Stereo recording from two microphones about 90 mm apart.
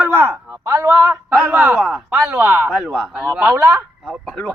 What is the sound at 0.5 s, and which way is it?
Speech, 40° right (ahead or behind).